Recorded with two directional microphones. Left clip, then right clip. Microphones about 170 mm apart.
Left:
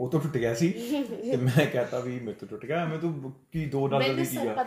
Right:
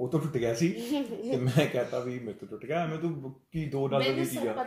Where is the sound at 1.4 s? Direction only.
15° left (ahead or behind).